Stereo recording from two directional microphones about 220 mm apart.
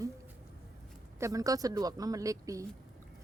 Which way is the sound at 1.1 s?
15° right (ahead or behind).